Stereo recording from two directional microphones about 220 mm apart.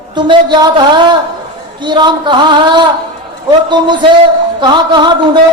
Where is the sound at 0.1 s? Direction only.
20° right (ahead or behind).